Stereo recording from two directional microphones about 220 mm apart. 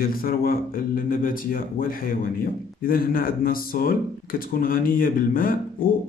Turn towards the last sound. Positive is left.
turn(degrees=40)  # may be behind; listen again after turning